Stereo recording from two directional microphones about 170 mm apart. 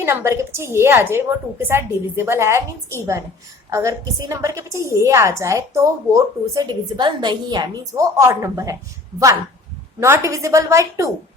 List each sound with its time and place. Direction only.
0.0 s a woman's voice: 15° right (ahead or behind)
10.0 s a woman's voice: 15° right (ahead or behind)